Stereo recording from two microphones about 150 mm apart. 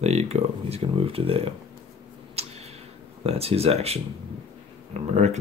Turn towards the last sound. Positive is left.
turn(degrees=-50)  # may be behind; listen again after turning